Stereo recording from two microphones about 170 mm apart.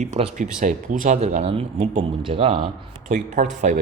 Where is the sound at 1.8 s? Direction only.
45° right (ahead or behind).